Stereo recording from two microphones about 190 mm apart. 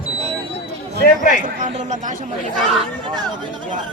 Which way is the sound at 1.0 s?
45° left (ahead or behind).